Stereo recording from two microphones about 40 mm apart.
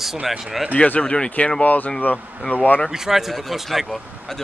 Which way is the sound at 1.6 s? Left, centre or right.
Left.